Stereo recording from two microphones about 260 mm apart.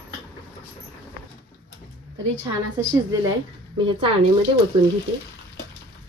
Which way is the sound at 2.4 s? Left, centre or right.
Centre.